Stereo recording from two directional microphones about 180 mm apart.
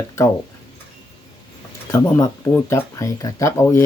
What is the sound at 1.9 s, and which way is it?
Speech, 15° left (ahead or behind).